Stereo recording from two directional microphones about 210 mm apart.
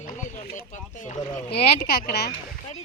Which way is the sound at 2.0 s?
50° left (ahead or behind).